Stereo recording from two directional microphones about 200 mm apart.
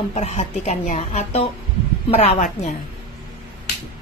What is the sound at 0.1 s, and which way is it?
A woman's voice, 35° left (ahead or behind).